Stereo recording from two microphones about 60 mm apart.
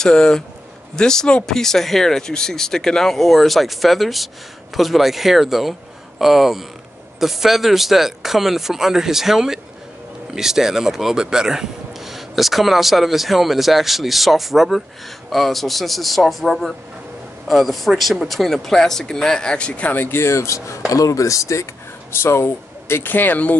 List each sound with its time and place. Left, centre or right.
0.0 s speech: centre
18.4 s speech: centre; by 20.1 s left
20.1 s speech: left
20.9 s speech: left
22.2 s speech: left